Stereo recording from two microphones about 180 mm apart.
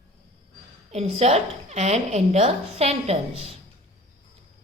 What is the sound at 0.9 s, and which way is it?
A woman's voice, 35° right (ahead or behind).